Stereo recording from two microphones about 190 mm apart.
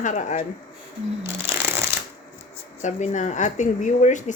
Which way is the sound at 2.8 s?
40° left (ahead or behind).